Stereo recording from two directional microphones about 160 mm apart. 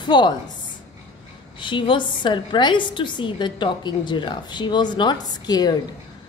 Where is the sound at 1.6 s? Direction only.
30° left (ahead or behind).